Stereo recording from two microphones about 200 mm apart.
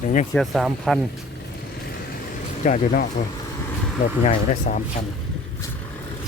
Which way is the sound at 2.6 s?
35° left (ahead or behind).